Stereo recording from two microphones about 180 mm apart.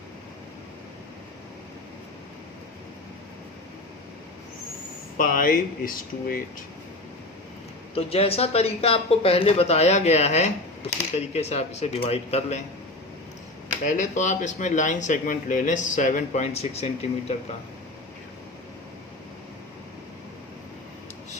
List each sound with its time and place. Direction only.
5.1 s speech: 50° left (ahead or behind)
7.9 s speech: 35° left (ahead or behind)
13.8 s speech: 45° left (ahead or behind)